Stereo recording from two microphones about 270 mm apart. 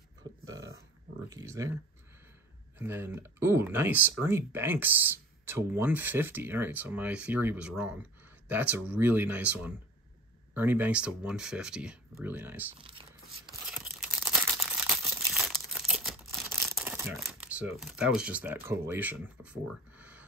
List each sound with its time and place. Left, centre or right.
0.2 s a sound: centre
1.3 s speech: centre
2.8 s speech: centre
12.7 s speech: centre
13.7 s crumpling: centre